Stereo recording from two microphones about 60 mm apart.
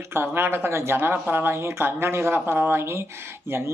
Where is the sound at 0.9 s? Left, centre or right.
Right.